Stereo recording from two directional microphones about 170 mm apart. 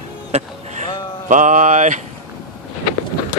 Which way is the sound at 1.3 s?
50° right (ahead or behind).